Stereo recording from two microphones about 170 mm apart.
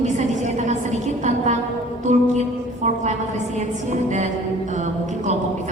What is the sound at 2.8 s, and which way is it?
A woman's voice, 45° right (ahead or behind).